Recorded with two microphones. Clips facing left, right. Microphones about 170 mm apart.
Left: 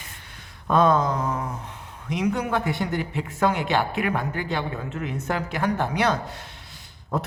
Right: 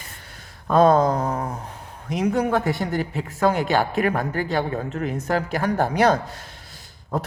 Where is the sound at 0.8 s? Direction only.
35° right (ahead or behind).